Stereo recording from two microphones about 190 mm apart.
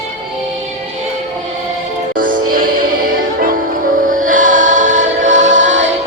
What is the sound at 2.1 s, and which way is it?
Music, 45° right (ahead or behind).